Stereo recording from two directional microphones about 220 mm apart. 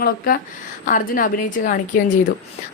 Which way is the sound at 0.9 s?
40° left (ahead or behind).